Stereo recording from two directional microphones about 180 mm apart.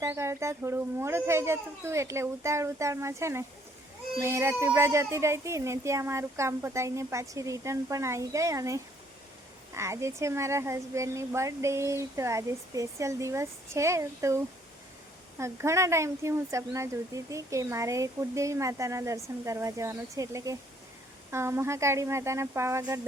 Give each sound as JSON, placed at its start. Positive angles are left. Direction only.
{"t": 0.0, "sound": "speech", "side_deg": -15}